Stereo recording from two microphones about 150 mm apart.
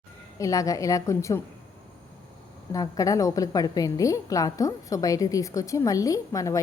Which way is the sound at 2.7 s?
25° left (ahead or behind).